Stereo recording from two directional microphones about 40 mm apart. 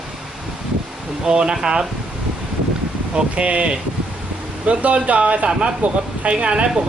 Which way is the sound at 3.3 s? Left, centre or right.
Right.